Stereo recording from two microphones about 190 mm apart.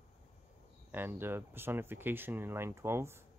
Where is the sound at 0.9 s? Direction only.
10° right (ahead or behind).